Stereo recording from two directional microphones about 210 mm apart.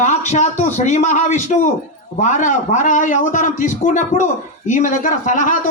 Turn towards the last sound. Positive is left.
turn(degrees=35)  # may be behind; listen again after turning